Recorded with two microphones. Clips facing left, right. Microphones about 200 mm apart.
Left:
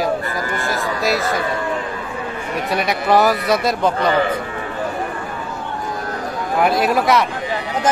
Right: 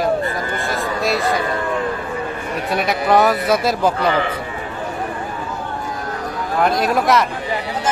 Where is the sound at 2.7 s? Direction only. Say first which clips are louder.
Even; centre (ahead or behind).